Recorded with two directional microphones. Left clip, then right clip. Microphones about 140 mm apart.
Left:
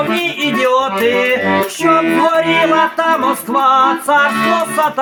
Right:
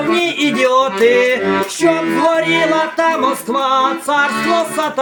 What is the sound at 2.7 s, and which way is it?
Music, centre (ahead or behind).